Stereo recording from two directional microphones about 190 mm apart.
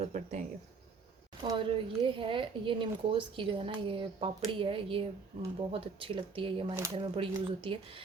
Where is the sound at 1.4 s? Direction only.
25° right (ahead or behind).